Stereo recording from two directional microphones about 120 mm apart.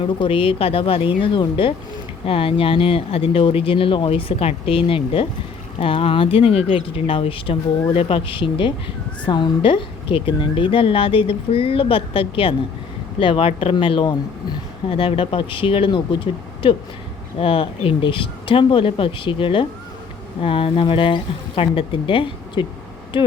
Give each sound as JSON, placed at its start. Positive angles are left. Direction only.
{"t": 0.0, "sound": "a woman's voice", "side_deg": 45}